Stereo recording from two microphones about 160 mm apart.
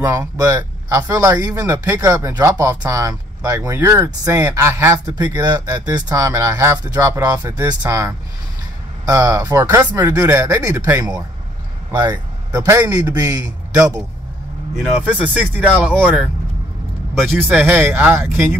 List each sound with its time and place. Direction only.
0.0 s speech: 20° right (ahead or behind)
11.9 s speech: 25° right (ahead or behind)
12.6 s speech: 15° right (ahead or behind)
14.8 s speech: 5° right (ahead or behind)
17.1 s speech: centre (ahead or behind)
17.6 s speech: 15° right (ahead or behind)